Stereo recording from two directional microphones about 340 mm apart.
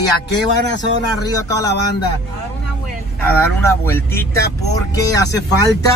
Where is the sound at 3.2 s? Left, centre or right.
Centre.